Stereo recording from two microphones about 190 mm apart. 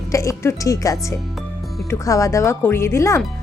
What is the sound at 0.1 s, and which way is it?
Speech, 15° left (ahead or behind).